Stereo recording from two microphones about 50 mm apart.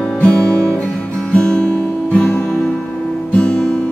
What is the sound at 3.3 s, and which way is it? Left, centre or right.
Guitar, left.